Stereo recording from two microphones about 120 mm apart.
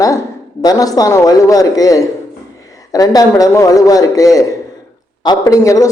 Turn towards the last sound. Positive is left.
turn(degrees=25)  # may be behind; listen again after turning